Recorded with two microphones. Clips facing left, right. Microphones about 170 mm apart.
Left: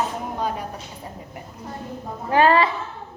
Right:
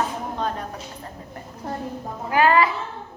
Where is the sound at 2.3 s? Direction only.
30° left (ahead or behind).